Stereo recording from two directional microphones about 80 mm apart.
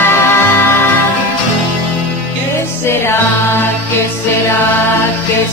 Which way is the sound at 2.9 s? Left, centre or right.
Left.